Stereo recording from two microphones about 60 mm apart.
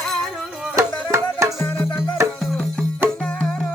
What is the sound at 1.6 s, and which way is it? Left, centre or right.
Music, left.